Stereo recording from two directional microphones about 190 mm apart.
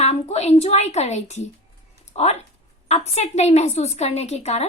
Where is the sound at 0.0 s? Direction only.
35° left (ahead or behind).